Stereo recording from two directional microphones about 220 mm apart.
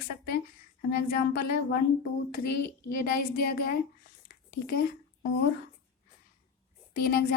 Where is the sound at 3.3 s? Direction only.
45° left (ahead or behind).